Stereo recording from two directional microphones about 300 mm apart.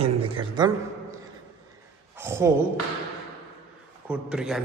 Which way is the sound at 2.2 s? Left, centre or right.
Centre.